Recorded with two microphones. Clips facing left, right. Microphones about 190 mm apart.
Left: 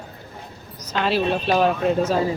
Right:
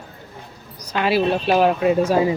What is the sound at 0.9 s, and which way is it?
Speech, 10° right (ahead or behind).